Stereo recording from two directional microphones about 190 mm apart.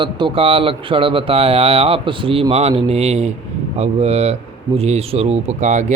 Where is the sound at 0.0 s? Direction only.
25° right (ahead or behind).